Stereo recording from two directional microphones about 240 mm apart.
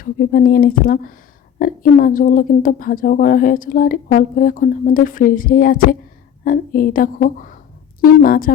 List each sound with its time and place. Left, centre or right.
0.0 s a woman's voice: left